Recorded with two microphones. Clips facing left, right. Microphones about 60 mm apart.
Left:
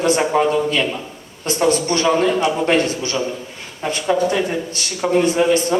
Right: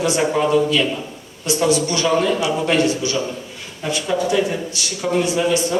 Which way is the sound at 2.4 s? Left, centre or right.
Left.